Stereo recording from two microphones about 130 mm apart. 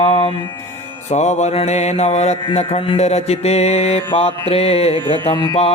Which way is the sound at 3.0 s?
55° left (ahead or behind).